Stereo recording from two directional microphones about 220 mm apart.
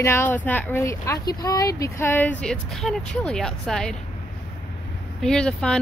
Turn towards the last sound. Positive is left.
turn(degrees=5)  # may be behind; listen again after turning